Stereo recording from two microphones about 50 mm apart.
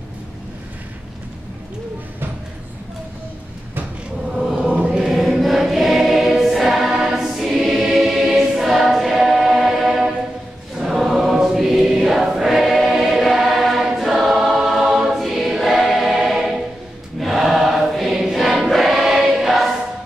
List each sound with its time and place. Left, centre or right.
4.6 s choir: right
4.9 s choir: centre